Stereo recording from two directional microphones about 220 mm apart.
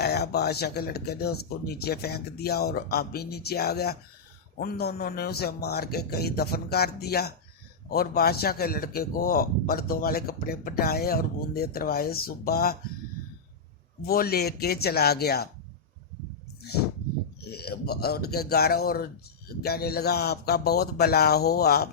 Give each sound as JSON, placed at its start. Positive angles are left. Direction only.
{"t": 0.0, "sound": "a man's voice", "side_deg": 45}
{"t": 14.1, "sound": "a man's voice", "side_deg": 45}
{"t": 17.4, "sound": "a man's voice", "side_deg": 45}